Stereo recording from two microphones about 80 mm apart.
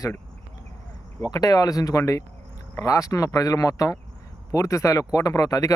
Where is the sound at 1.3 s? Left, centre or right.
Left.